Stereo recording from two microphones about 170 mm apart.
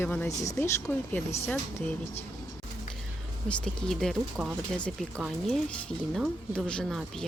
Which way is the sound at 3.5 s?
5° left (ahead or behind).